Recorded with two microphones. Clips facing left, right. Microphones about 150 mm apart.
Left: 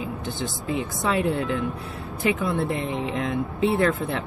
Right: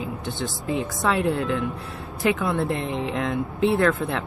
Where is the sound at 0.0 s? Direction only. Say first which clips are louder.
Even; centre (ahead or behind).